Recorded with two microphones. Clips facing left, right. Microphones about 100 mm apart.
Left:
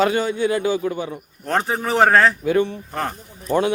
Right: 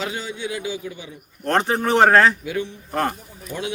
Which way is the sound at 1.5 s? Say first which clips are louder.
Right 2 dB; centre (ahead or behind).